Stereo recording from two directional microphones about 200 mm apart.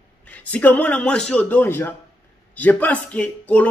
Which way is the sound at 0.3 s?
10° left (ahead or behind).